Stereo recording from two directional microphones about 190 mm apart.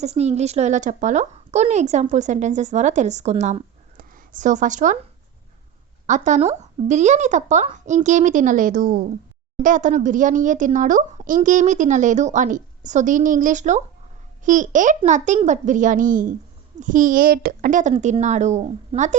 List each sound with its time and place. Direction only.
0.0 s speech: 35° right (ahead or behind)
6.1 s a child's voice: 40° right (ahead or behind)